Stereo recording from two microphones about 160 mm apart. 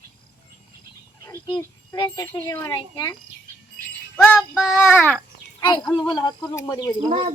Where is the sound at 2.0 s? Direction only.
20° left (ahead or behind).